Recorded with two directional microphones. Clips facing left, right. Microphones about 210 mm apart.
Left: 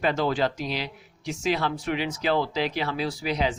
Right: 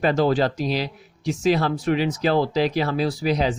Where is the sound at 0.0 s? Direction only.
40° right (ahead or behind).